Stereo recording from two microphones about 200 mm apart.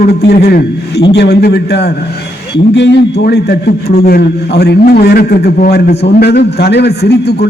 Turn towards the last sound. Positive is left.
turn(degrees=55)  # may be behind; listen again after turning